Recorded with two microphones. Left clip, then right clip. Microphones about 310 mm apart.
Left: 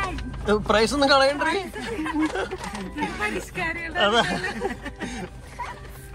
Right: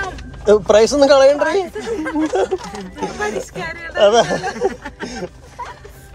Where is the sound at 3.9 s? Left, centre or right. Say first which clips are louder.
Right 9 dB; centre.